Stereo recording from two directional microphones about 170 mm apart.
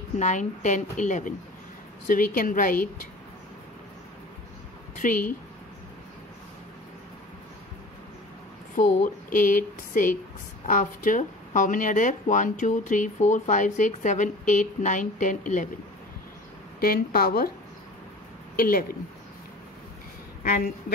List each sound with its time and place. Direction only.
0.2 s a woman's voice: 45° left (ahead or behind)
5.0 s speech: 50° left (ahead or behind)
8.7 s speech: 50° left (ahead or behind)
16.8 s a woman's voice: 60° left (ahead or behind)
18.6 s a woman's voice: 60° left (ahead or behind)
20.4 s speech: 60° left (ahead or behind)